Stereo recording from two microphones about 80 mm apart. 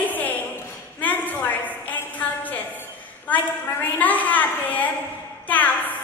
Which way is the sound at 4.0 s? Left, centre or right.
Left.